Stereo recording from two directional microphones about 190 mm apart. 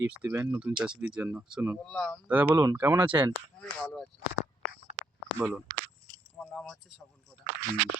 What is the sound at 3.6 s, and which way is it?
Speech, 5° left (ahead or behind).